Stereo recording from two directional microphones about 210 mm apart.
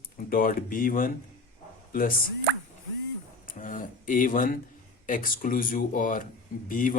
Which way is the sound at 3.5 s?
40° left (ahead or behind).